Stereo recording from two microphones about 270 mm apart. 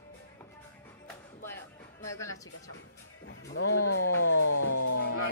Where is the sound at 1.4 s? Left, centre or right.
Centre.